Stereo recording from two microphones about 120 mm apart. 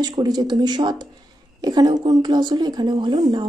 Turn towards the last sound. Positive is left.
turn(degrees=-40)  # may be behind; listen again after turning